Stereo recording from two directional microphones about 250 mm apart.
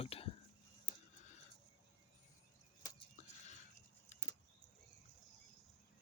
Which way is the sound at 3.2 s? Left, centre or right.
Left.